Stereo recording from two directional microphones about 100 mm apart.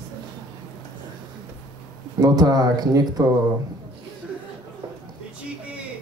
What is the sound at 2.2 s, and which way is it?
Speech, 40° right (ahead or behind).